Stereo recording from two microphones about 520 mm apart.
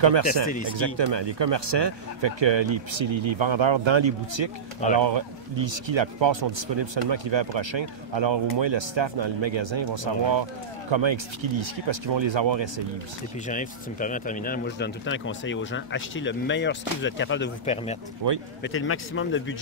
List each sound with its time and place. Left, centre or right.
0.0 s speech: right
13.5 s speech: centre
18.2 s speech: right
18.6 s speech: left